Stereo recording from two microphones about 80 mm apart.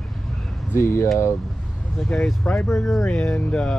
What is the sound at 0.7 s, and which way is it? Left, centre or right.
Speech, left.